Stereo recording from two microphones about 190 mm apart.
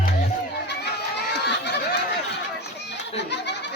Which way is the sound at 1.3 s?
65° left (ahead or behind).